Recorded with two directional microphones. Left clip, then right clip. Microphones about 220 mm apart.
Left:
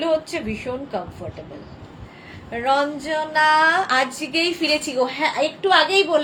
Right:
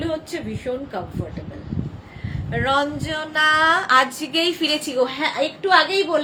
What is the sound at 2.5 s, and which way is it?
A woman's voice, 15° right (ahead or behind).